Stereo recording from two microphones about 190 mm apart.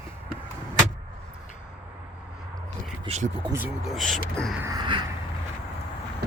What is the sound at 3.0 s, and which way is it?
Speech, 30° right (ahead or behind).